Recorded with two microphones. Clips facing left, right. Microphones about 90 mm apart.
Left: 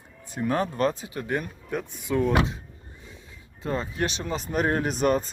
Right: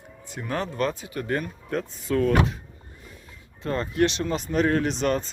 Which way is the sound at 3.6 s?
5° left (ahead or behind).